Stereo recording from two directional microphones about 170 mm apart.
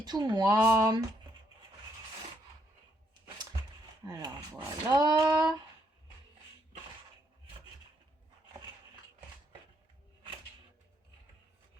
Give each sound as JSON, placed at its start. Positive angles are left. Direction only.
{"t": 0.0, "sound": "speech", "side_deg": -25}
{"t": 4.0, "sound": "speech", "side_deg": -25}